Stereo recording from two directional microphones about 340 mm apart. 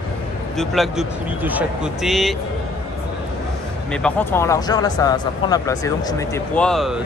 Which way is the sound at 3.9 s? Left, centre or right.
Centre.